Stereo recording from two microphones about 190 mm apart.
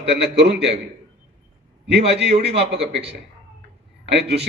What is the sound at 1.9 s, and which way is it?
A man's voice, 60° right (ahead or behind).